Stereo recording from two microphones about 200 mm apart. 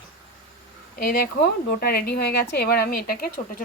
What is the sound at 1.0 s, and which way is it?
A woman's voice, 50° left (ahead or behind).